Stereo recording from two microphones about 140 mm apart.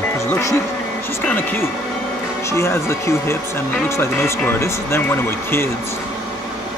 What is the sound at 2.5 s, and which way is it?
Speech, 20° left (ahead or behind).